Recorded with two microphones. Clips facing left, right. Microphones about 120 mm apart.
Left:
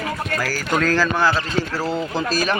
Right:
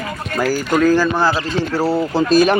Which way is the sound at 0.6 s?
5° right (ahead or behind).